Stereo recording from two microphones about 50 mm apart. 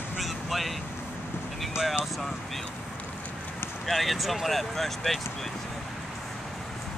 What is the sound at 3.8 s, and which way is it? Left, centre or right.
Speech, centre.